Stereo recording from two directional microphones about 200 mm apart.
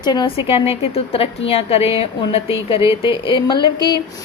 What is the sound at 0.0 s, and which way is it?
A woman's voice, 20° left (ahead or behind).